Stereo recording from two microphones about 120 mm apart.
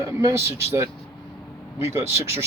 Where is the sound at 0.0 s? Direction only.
30° right (ahead or behind).